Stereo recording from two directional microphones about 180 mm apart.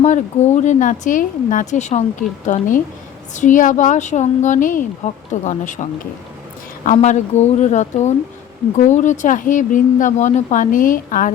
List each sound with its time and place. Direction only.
0.0 s speech: 40° left (ahead or behind)